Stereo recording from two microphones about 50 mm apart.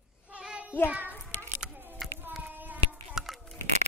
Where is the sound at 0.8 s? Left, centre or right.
Right.